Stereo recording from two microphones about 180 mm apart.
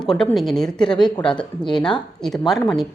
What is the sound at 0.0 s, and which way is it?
Speech, 5° left (ahead or behind).